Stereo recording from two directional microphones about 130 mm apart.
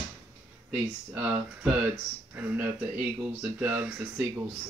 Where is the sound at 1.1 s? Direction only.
10° right (ahead or behind).